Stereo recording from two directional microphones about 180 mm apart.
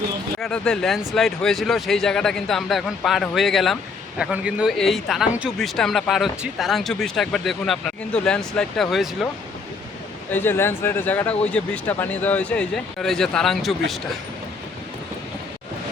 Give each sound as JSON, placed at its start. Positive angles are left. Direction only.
{"t": 0.3, "sound": "speech", "side_deg": 5}
{"t": 10.3, "sound": "speech", "side_deg": 10}